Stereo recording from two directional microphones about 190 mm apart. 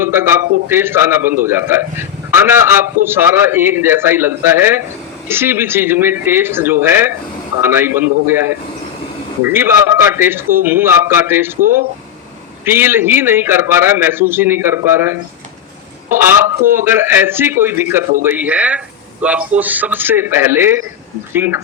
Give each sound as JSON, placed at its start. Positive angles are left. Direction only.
{"t": 0.0, "sound": "a man's voice", "side_deg": -10}
{"t": 11.6, "sound": "speech", "side_deg": -45}
{"t": 12.6, "sound": "a man's voice", "side_deg": -10}